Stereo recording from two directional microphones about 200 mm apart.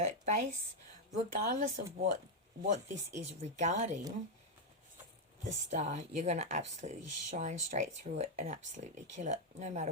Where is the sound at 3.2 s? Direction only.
35° right (ahead or behind).